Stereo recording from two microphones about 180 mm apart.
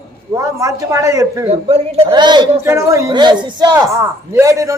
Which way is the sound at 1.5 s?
35° right (ahead or behind).